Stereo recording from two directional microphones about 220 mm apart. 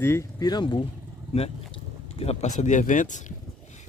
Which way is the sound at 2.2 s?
30° left (ahead or behind).